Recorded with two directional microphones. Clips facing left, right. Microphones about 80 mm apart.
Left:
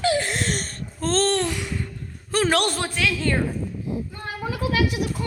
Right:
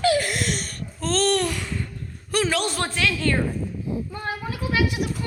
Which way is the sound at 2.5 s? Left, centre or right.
Left.